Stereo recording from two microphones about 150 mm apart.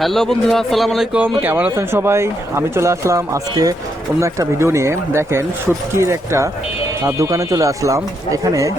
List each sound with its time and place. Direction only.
0.0 s a man's voice: centre (ahead or behind); by 8.7 s 20° right (ahead or behind)